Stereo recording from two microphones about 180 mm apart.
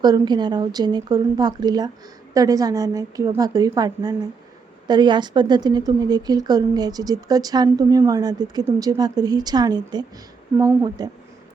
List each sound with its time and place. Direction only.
0.0 s speech: 25° right (ahead or behind)